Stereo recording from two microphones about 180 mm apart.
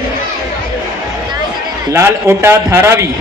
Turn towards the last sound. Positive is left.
turn(degrees=-15)  # may be behind; listen again after turning